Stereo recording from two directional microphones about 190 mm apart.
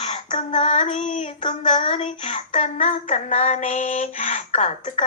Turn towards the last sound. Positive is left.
turn(degrees=35)  # may be behind; listen again after turning